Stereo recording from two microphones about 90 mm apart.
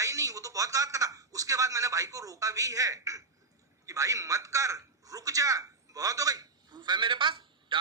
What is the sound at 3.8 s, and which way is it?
A man's voice, 35° right (ahead or behind).